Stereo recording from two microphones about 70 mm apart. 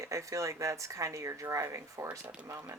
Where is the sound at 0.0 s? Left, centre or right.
Right.